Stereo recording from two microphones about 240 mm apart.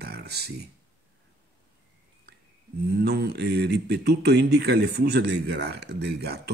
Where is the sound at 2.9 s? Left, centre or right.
Right.